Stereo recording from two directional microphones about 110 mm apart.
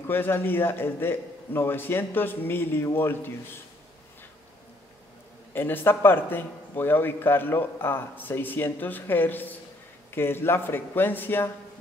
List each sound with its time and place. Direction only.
0.0 s a man's voice: 20° left (ahead or behind)
5.5 s a man's voice: 20° left (ahead or behind)